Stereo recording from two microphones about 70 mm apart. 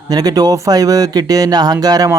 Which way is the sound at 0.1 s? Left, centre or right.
Right.